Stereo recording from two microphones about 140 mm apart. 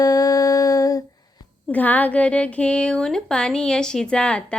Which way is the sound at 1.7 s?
10° left (ahead or behind).